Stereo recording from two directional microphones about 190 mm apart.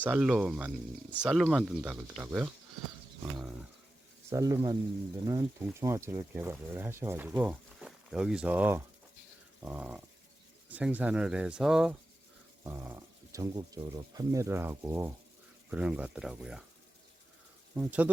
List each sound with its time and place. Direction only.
0.0 s speech: 5° right (ahead or behind)
4.3 s speech: 15° right (ahead or behind)
9.6 s dog: 5° right (ahead or behind)
10.7 s speech: 10° right (ahead or behind)
12.6 s speech: 15° right (ahead or behind)
17.7 s speech: 10° right (ahead or behind)